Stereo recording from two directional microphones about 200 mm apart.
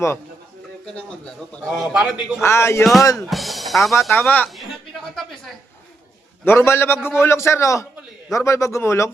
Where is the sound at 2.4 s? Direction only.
15° left (ahead or behind).